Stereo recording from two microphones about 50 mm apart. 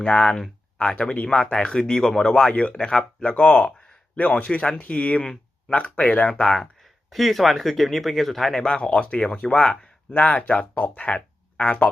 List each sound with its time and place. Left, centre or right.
0.0 s speech: left; by 2.5 s centre
2.5 s speech: left
2.7 s speech: centre
5.2 s a sound: centre
5.7 s speech: left
7.1 s speech: centre
8.6 s speech: left
10.1 s speech: left